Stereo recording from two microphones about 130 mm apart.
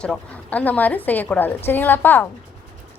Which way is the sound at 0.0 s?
10° left (ahead or behind).